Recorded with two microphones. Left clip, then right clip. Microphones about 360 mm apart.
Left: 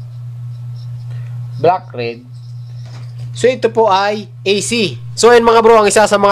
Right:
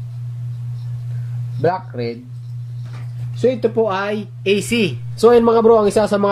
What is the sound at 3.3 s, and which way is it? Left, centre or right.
Speech, left.